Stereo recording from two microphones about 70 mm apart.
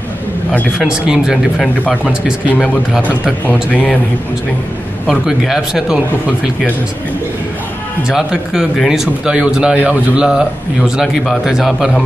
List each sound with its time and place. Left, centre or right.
0.7 s a man's voice: centre
2.5 s a man's voice: centre
5.0 s speech: centre
8.1 s a man's voice: centre